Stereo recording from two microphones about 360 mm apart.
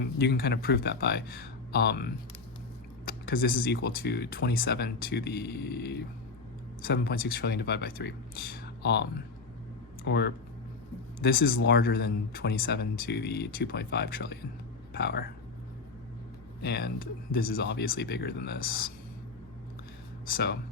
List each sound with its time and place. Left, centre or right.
0.0 s speech: left
16.6 s speech: left
20.2 s speech: left